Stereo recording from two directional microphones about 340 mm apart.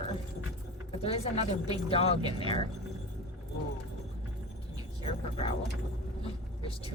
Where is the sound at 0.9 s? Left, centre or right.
Centre.